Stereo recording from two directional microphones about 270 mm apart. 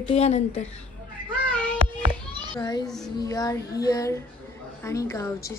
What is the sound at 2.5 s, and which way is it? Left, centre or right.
A child's voice, centre.